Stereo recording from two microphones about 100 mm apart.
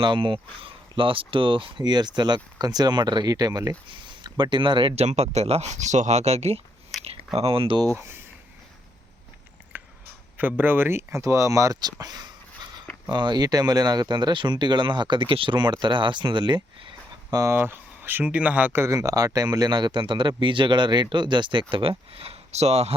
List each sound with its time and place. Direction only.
0.0 s speech: 55° right (ahead or behind); by 3.8 s 35° right (ahead or behind)
3.9 s speech: 55° right (ahead or behind); by 6.6 s 90° right
6.9 s a sound: centre (ahead or behind)
7.3 s speech: 75° right (ahead or behind)
9.7 s a sound: 20° right (ahead or behind)
10.3 s speech: 20° right (ahead or behind); by 16.9 s 50° right (ahead or behind)
17.5 s speech: 20° right (ahead or behind)
18.9 s speech: 35° right (ahead or behind); by 21.6 s 50° right (ahead or behind)
21.7 s speech: 65° right (ahead or behind); by 23.0 s 90° right